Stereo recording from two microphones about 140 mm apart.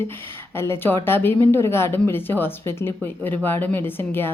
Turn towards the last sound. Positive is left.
turn(degrees=15)  # may be behind; listen again after turning